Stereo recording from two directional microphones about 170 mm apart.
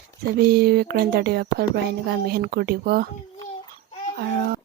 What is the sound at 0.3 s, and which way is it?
Speech, 65° right (ahead or behind).